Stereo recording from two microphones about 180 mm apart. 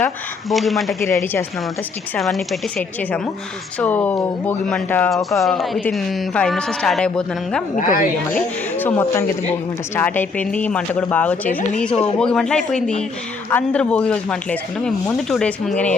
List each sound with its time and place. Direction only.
0.5 s speech: centre (ahead or behind)
1.2 s speech: 10° left (ahead or behind)
2.1 s speech: centre (ahead or behind)
7.8 s a woman's voice: 50° left (ahead or behind)
8.3 s speech: 10° left (ahead or behind)